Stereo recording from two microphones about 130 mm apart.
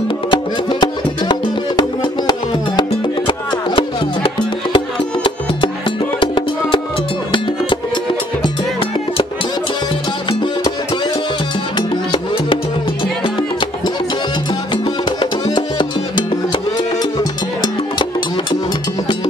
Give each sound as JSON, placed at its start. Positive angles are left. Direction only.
{"t": 0.3, "sound": "music", "side_deg": 35}
{"t": 13.2, "sound": "music", "side_deg": 40}